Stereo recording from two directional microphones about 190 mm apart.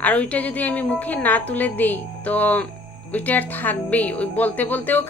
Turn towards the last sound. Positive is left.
turn(degrees=10)  # may be behind; listen again after turning